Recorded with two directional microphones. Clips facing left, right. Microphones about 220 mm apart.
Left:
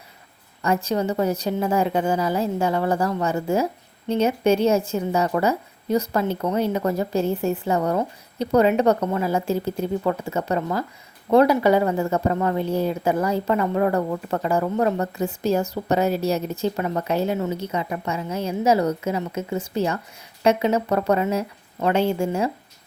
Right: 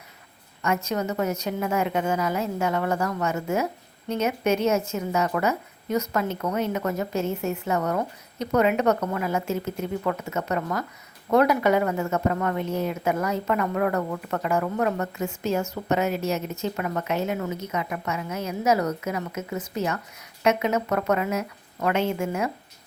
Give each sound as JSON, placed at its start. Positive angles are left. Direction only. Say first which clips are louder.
{"t": 0.6, "sound": "speech", "louder": "left 4 dB", "side_deg": 35}